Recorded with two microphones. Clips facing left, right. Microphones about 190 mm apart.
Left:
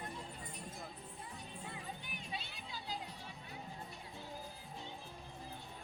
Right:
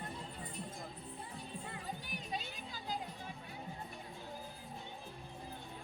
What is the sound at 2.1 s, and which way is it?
Music, 40° right (ahead or behind).